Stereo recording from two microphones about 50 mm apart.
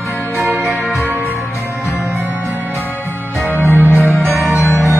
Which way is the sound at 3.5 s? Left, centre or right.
Right.